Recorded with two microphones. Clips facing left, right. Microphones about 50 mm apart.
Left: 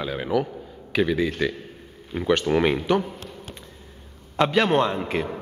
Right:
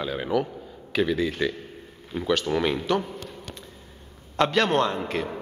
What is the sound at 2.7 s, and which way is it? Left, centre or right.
Speech, centre.